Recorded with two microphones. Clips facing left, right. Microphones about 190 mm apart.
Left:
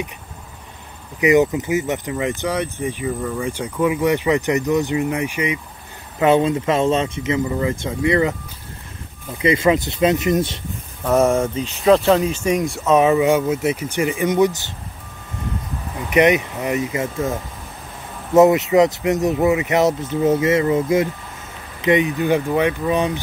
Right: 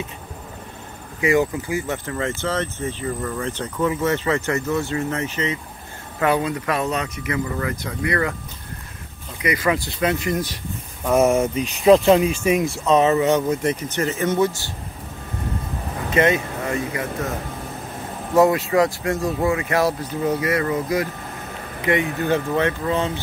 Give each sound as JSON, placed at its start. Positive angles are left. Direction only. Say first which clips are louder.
{"t": 1.2, "sound": "speech", "louder": "left 4 dB", "side_deg": 20}
{"t": 9.4, "sound": "speech", "louder": "left 5 dB", "side_deg": 25}
{"t": 11.1, "sound": "speech", "louder": "left 1 dB", "side_deg": 0}
{"t": 11.3, "sound": "speech", "louder": "even", "side_deg": -15}
{"t": 16.1, "sound": "speech", "louder": "left 4 dB", "side_deg": 20}
{"t": 18.3, "sound": "speech", "louder": "left 4 dB", "side_deg": 20}